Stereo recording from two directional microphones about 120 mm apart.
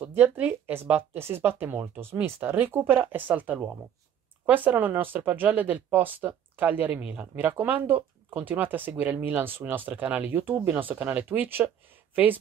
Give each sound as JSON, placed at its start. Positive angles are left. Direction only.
{"t": 0.0, "sound": "speech", "side_deg": -15}